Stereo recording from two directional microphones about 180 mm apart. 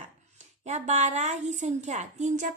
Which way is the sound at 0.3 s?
40° right (ahead or behind).